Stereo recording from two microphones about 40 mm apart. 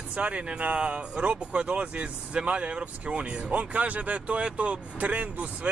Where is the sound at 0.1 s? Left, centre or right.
Right.